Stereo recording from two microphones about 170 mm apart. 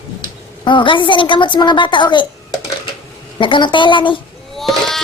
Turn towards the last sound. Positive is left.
turn(degrees=0)  # may be behind; listen again after turning